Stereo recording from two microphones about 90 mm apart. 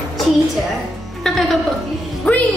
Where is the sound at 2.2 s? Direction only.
15° left (ahead or behind).